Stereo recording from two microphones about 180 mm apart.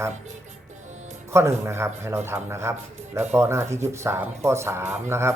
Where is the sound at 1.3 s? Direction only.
15° right (ahead or behind).